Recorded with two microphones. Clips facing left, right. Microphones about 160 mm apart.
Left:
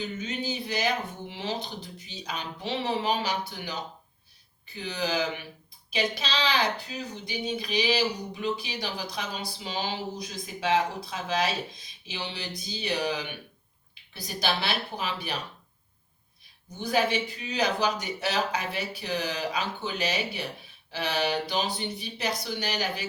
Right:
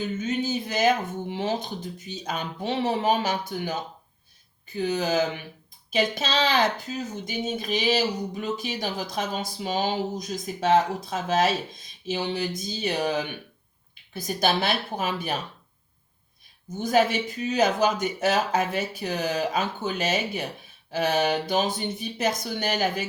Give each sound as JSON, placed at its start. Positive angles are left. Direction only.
{"t": 0.2, "sound": "speech", "side_deg": -45}
{"t": 16.6, "sound": "speech", "side_deg": -45}